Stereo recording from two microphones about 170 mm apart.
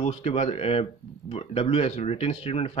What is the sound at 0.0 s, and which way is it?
Speech, 35° left (ahead or behind).